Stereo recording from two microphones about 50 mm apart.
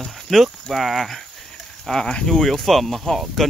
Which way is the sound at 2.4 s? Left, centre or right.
Centre.